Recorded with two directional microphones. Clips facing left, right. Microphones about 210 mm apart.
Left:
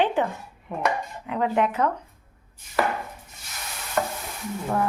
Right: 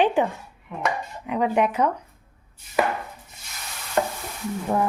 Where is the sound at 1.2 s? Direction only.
15° right (ahead or behind).